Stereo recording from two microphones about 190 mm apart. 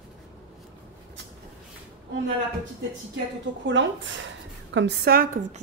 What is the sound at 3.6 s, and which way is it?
Speech, 75° right (ahead or behind).